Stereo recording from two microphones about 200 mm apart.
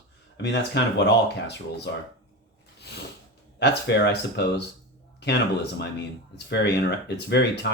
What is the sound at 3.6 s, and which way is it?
Speech, 60° left (ahead or behind).